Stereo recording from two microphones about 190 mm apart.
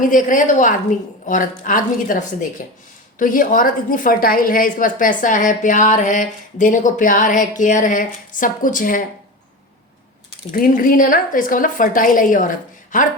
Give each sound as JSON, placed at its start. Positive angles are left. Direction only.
{"t": 0.0, "sound": "a woman's voice", "side_deg": 45}
{"t": 10.5, "sound": "a woman's voice", "side_deg": 50}